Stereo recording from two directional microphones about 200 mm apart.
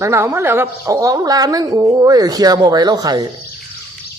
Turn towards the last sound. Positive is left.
turn(degrees=-20)  # may be behind; listen again after turning